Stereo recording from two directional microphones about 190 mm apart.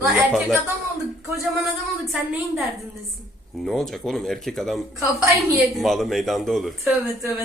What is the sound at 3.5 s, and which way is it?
Speech, centre (ahead or behind).